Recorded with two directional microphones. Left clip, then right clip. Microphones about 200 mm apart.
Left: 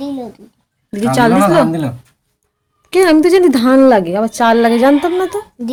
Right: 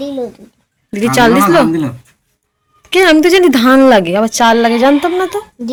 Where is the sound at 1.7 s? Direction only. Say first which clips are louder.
Right 3 dB; 45° left (ahead or behind).